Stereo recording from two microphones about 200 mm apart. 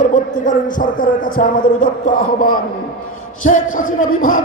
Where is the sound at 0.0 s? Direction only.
40° left (ahead or behind).